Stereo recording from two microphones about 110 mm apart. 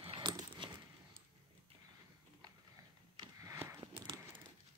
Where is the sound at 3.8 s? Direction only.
50° right (ahead or behind).